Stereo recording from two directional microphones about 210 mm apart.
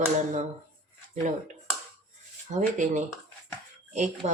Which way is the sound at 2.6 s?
35° right (ahead or behind).